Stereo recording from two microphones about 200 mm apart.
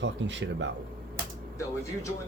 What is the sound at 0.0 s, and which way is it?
Speech, 65° right (ahead or behind).